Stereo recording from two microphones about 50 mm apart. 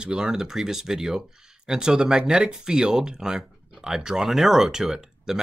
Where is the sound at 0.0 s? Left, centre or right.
Centre.